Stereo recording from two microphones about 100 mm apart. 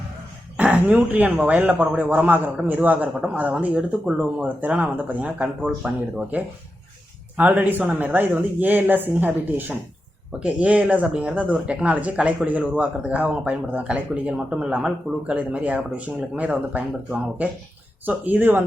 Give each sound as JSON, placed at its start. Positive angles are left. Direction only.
{"t": 0.5, "sound": "speech", "side_deg": -15}